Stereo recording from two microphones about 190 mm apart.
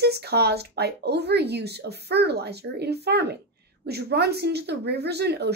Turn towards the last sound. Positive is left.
turn(degrees=-60)  # may be behind; listen again after turning